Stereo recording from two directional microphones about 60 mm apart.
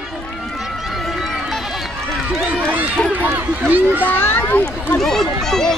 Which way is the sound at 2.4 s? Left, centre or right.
Centre.